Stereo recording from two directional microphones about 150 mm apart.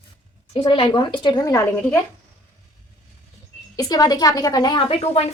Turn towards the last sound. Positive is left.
turn(degrees=40)  # may be behind; listen again after turning